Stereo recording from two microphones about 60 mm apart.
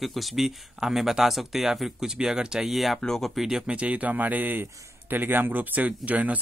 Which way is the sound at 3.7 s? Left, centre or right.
Right.